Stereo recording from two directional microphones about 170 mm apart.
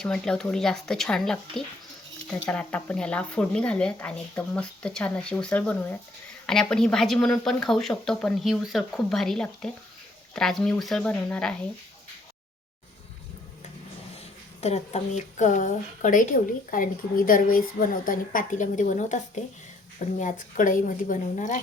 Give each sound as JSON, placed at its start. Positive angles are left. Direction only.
{"t": 0.0, "sound": "speech", "side_deg": 5}
{"t": 14.6, "sound": "a woman's voice", "side_deg": 40}